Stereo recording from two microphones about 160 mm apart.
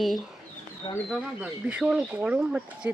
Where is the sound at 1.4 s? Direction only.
5° right (ahead or behind).